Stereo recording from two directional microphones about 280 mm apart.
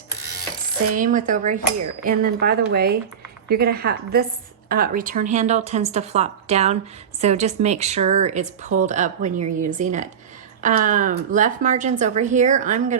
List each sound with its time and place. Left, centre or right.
0.9 s speech: right